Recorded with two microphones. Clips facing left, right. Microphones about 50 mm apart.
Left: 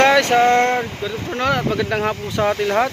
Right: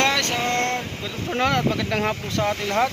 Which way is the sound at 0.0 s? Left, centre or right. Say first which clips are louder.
Left 8 dB; centre.